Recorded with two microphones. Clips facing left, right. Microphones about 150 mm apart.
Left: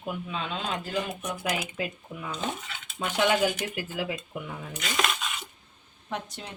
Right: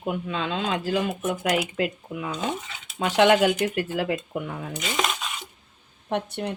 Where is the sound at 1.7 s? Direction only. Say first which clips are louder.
Right 7 dB; 70° right (ahead or behind); by 4.7 s 55° right (ahead or behind).